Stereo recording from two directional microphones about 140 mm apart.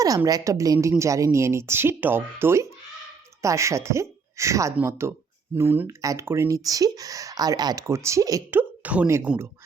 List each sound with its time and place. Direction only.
0.3 s speech: 25° right (ahead or behind)